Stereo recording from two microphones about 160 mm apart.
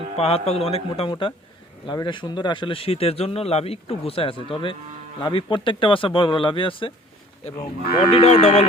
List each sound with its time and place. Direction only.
0.2 s a man's voice: 40° left (ahead or behind)
8.1 s speech: 40° left (ahead or behind)